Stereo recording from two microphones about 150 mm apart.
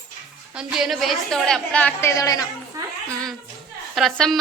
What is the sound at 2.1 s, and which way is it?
Speech, 20° left (ahead or behind).